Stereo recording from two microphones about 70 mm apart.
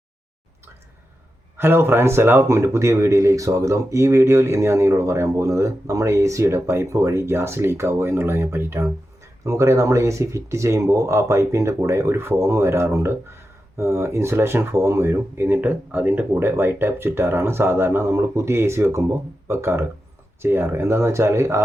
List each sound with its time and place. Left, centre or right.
1.5 s speech: right
9.4 s speech: right